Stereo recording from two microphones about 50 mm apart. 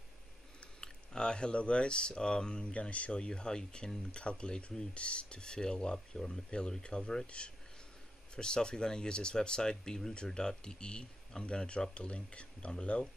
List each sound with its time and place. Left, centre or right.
0.7 s speech: centre